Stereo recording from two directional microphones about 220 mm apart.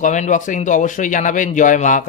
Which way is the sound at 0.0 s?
35° left (ahead or behind).